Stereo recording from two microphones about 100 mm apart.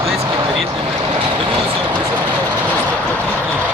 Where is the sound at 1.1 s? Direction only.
60° right (ahead or behind).